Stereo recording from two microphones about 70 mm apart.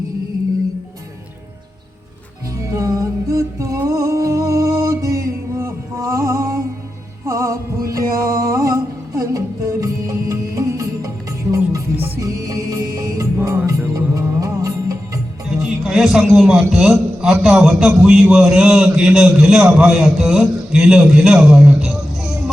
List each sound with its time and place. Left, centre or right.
2.6 s music: right
15.6 s a sound: centre
17.4 s a man's voice: centre